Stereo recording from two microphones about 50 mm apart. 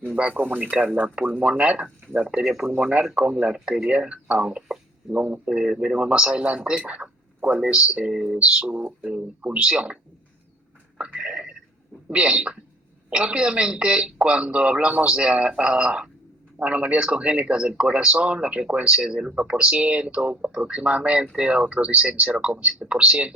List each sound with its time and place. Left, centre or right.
0.2 s speech: right
2.4 s speech: centre
3.2 s speech: right
3.5 s speech: centre
8.1 s speech: centre
8.4 s speech: right
10.9 s a sound: right
12.0 s speech: right